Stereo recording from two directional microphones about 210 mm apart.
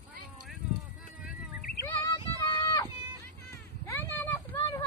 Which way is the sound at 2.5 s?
20° left (ahead or behind).